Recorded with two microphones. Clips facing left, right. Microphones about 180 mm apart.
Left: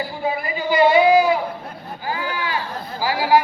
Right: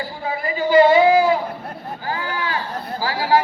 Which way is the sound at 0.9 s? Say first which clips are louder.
Even; 15° left (ahead or behind).